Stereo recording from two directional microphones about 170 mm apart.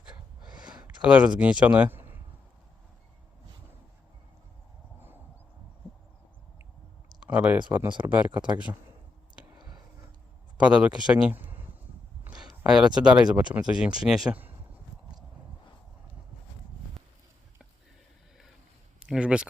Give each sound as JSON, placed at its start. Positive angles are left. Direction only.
{"t": 0.6, "sound": "a sound", "side_deg": -5}
{"t": 1.0, "sound": "speech", "side_deg": -5}
{"t": 7.3, "sound": "speech", "side_deg": -5}
{"t": 9.6, "sound": "a sound", "side_deg": -25}
{"t": 10.6, "sound": "speech", "side_deg": -5}
{"t": 18.9, "sound": "speech", "side_deg": -5}